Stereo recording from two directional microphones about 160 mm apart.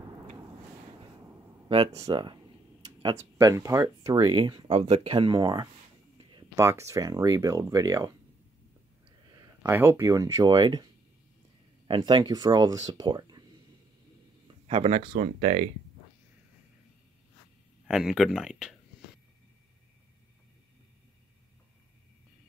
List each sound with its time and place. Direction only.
1.7 s speech: 35° right (ahead or behind)
4.7 s speech: 40° right (ahead or behind)
6.1 s a sound: 30° right (ahead or behind)
6.6 s speech: 15° right (ahead or behind)
9.3 s a sound: 25° right (ahead or behind)
9.7 s speech: 15° right (ahead or behind)
11.9 s speech: 30° right (ahead or behind)
14.7 s speech: 40° right (ahead or behind)
17.8 s speech: centre (ahead or behind)